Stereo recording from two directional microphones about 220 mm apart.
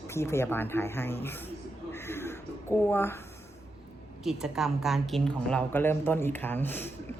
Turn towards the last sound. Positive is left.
turn(degrees=10)  # may be behind; listen again after turning